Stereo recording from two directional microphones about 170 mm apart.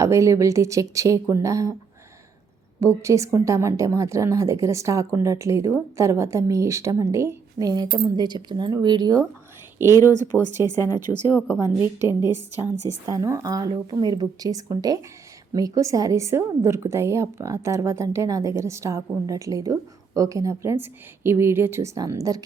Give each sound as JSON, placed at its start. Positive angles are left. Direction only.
{"t": 0.0, "sound": "a woman's voice", "side_deg": -20}
{"t": 2.8, "sound": "a woman's voice", "side_deg": -20}
{"t": 9.8, "sound": "speech", "side_deg": 20}
{"t": 11.0, "sound": "a woman's voice", "side_deg": -10}